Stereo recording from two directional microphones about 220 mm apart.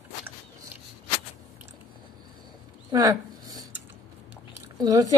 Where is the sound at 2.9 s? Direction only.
15° right (ahead or behind).